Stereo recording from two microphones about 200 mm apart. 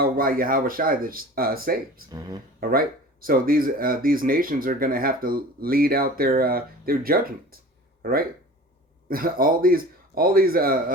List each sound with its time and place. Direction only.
0.0 s speech: 45° right (ahead or behind)
2.0 s speech: 20° right (ahead or behind)
2.6 s speech: 45° right (ahead or behind)
9.0 s speech: 45° right (ahead or behind)